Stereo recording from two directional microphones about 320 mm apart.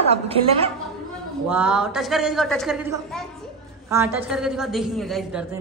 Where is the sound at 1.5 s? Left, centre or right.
Centre.